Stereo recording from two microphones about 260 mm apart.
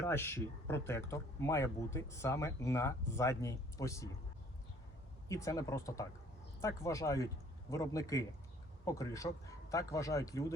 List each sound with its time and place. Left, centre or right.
0.1 s speech: centre
5.3 s speech: centre